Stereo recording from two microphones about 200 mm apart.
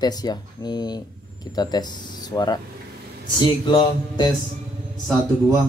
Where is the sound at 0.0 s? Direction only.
20° left (ahead or behind).